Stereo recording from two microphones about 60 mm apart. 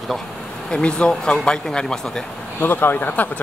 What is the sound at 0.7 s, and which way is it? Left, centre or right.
Speech, centre.